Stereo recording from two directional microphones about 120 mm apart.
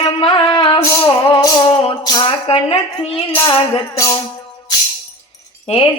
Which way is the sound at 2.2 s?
50° left (ahead or behind).